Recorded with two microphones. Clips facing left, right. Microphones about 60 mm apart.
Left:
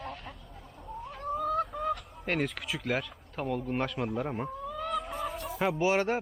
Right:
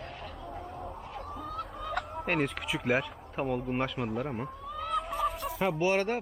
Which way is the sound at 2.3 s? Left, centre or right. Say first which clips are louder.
Even; centre.